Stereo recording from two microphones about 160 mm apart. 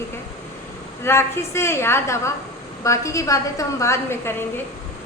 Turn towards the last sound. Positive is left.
turn(degrees=15)  # may be behind; listen again after turning